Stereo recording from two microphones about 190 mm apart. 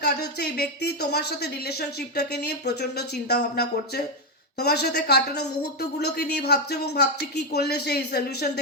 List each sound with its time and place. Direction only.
0.0 s speech: 60° left (ahead or behind)